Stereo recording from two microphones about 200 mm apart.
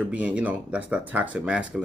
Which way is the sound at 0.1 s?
5° right (ahead or behind).